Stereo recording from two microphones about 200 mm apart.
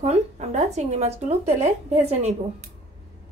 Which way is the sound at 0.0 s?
35° right (ahead or behind).